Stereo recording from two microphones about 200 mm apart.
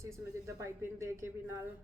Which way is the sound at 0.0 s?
15° right (ahead or behind).